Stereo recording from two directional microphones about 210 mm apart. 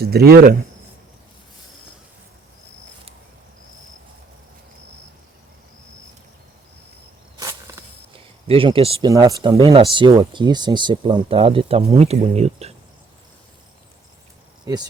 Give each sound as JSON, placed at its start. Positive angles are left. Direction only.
{"t": 0.0, "sound": "speech", "side_deg": -50}
{"t": 8.4, "sound": "speech", "side_deg": -25}
{"t": 14.6, "sound": "a sound", "side_deg": -20}